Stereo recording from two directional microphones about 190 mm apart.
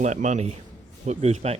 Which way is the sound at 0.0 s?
40° right (ahead or behind).